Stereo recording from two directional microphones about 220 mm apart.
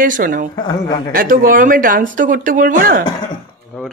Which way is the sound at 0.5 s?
20° left (ahead or behind).